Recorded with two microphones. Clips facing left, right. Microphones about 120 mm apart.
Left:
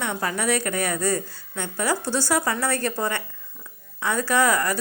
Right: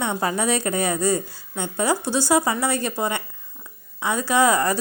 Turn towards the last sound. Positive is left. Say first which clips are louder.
# right 2 dB
turn(degrees=-20)  # may be behind; listen again after turning